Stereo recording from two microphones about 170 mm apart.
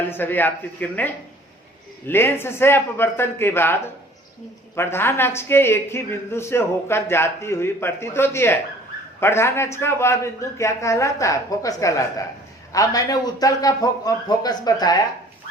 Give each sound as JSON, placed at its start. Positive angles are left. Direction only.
{"t": 0.1, "sound": "a man's voice", "side_deg": 10}